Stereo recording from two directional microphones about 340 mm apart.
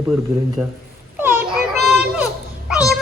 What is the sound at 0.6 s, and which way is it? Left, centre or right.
Speech, centre.